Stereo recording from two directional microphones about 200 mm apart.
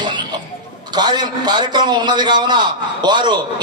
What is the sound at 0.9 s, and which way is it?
A man's voice, 20° right (ahead or behind).